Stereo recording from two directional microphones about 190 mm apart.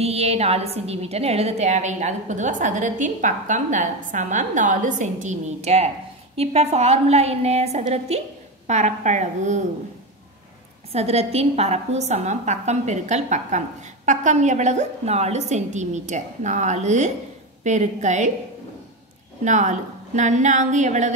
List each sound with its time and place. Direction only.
0.0 s a woman's voice: 35° right (ahead or behind)
10.9 s a woman's voice: 35° right (ahead or behind)
19.4 s a woman's voice: 40° right (ahead or behind)